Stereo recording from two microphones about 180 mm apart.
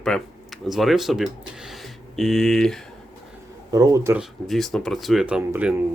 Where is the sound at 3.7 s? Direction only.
20° right (ahead or behind).